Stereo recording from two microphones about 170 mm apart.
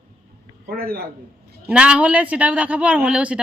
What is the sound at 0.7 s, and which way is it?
Speech, 65° right (ahead or behind).